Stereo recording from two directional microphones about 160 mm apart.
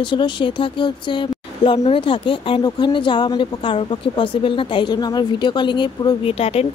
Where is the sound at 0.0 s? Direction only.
30° left (ahead or behind).